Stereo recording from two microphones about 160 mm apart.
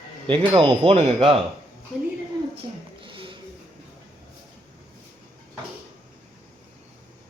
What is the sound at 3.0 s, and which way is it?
Music, 30° right (ahead or behind).